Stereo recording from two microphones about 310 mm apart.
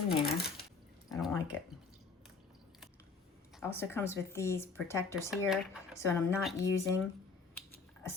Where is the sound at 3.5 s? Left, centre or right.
Centre.